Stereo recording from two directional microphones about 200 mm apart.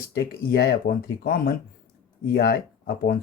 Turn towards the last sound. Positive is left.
turn(degrees=50)  # may be behind; listen again after turning